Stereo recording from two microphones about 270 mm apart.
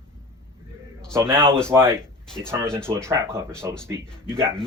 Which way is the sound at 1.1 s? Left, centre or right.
Centre.